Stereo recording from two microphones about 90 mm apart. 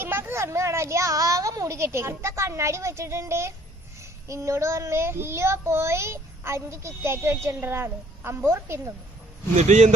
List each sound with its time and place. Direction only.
0.0 s a woman's voice: 25° right (ahead or behind)